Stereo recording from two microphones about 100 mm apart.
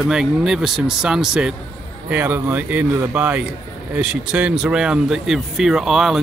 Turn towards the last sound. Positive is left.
turn(degrees=-5)  # may be behind; listen again after turning